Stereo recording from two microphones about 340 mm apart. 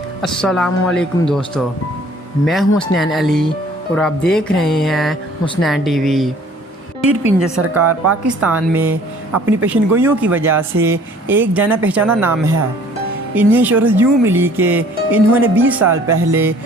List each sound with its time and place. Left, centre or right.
0.2 s speech: centre
7.6 s speech: right
8.4 s speech: centre